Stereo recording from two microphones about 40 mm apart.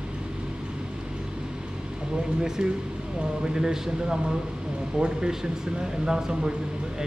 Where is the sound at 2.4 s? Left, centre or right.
Centre.